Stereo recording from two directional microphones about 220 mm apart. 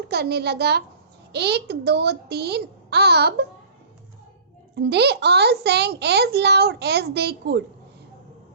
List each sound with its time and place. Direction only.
0.1 s a child's voice: 45° right (ahead or behind)
4.7 s a child's voice: 50° right (ahead or behind)